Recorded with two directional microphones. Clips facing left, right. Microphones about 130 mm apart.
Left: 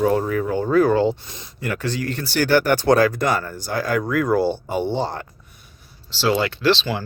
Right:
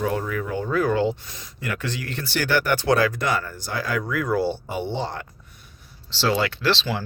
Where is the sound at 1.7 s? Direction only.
40° left (ahead or behind).